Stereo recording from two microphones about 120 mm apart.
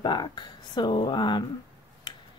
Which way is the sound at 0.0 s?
40° left (ahead or behind).